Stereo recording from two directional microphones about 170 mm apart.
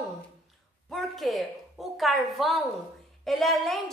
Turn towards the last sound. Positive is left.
turn(degrees=0)  # may be behind; listen again after turning